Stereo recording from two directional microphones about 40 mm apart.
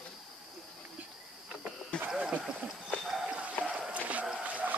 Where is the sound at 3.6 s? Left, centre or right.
Left.